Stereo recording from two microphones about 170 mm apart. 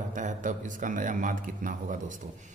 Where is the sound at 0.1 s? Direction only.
50° right (ahead or behind).